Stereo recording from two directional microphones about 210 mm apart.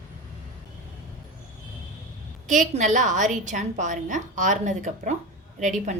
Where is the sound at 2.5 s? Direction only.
35° right (ahead or behind).